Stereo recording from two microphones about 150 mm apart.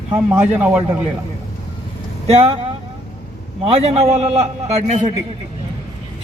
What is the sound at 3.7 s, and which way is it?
A man's voice, 45° right (ahead or behind).